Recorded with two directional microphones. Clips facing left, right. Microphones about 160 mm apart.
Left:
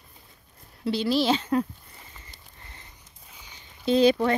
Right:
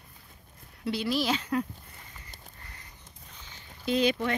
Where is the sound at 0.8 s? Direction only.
30° left (ahead or behind).